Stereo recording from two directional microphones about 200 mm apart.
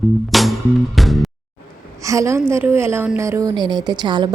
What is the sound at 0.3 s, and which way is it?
Music, centre (ahead or behind).